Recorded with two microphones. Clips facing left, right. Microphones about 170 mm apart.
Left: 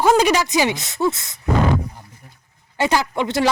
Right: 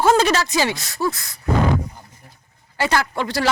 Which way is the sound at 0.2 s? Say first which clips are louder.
Left 2 dB; 15° left (ahead or behind).